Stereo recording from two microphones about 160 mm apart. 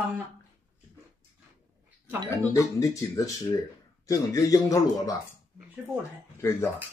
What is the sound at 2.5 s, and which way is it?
Speech, 20° left (ahead or behind).